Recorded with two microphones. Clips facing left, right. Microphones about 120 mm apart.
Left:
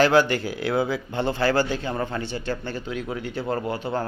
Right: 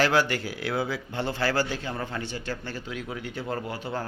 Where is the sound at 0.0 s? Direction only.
25° left (ahead or behind).